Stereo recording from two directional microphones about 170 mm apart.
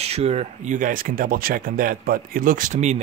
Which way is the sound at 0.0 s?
40° right (ahead or behind).